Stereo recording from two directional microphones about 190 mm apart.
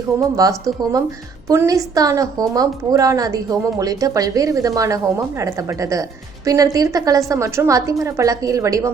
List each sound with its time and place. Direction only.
0.2 s a woman's voice: 20° right (ahead or behind)